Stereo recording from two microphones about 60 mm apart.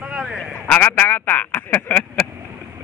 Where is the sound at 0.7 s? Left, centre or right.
Left.